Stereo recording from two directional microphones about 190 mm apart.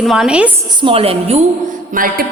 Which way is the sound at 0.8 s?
30° right (ahead or behind).